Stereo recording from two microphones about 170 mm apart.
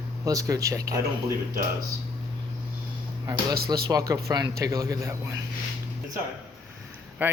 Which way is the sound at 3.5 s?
65° right (ahead or behind).